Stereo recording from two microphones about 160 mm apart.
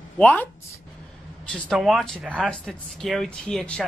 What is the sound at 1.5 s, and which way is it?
Speech, centre (ahead or behind).